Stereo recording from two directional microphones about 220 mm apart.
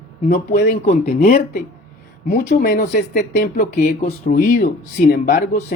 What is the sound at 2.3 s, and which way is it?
A woman's voice, 45° left (ahead or behind).